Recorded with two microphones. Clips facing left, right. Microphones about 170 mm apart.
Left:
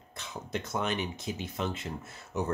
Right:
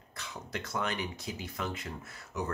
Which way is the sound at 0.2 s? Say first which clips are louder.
Left 4 dB; 20° left (ahead or behind).